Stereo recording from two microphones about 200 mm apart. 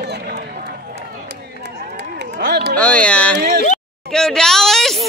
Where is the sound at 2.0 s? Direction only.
55° right (ahead or behind).